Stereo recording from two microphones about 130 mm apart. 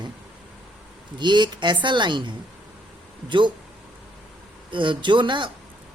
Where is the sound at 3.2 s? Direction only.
40° right (ahead or behind).